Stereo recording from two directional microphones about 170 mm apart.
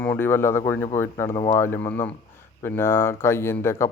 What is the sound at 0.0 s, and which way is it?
A man's voice, 10° left (ahead or behind).